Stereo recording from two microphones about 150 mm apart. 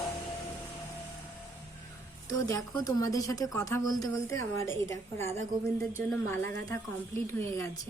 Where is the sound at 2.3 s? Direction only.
20° left (ahead or behind).